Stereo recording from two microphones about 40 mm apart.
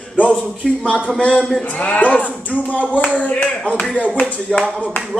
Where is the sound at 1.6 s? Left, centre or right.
Left.